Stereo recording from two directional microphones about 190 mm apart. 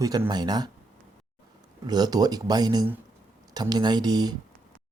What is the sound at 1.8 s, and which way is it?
Speech, 20° right (ahead or behind).